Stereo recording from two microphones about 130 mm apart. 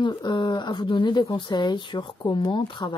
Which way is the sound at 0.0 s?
35° left (ahead or behind).